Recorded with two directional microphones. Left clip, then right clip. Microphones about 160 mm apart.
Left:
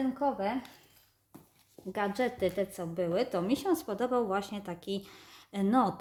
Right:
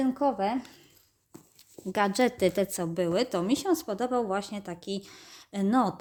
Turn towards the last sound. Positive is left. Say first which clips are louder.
# right 2 dB
turn(degrees=-30)  # may be behind; listen again after turning